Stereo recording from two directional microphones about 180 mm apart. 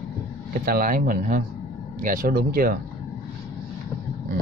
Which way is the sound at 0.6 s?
55° right (ahead or behind).